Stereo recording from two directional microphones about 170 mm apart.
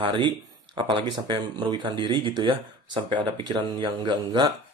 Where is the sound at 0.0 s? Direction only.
30° right (ahead or behind).